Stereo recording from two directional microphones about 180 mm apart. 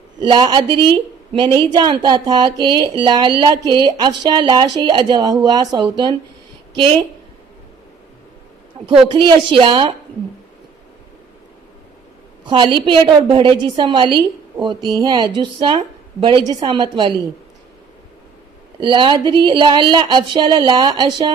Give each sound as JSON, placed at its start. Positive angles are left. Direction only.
{"t": 0.2, "sound": "speech", "side_deg": -25}
{"t": 9.1, "sound": "speech", "side_deg": -25}
{"t": 12.4, "sound": "speech", "side_deg": -25}
{"t": 18.8, "sound": "speech", "side_deg": -25}